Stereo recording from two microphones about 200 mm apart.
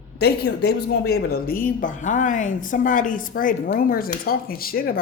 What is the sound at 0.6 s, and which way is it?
Speech, 55° left (ahead or behind).